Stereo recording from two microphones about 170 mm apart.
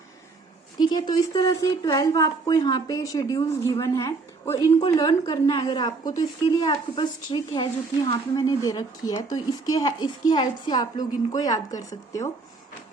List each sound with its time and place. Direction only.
0.8 s a woman's voice: 25° left (ahead or behind)